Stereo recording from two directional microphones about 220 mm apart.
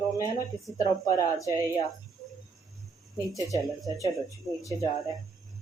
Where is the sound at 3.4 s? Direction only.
15° right (ahead or behind).